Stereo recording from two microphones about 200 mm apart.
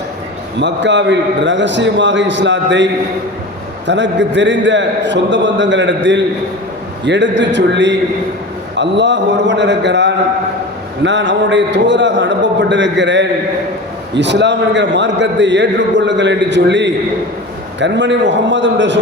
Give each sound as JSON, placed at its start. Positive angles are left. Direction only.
{"t": 0.6, "sound": "a man's voice", "side_deg": -60}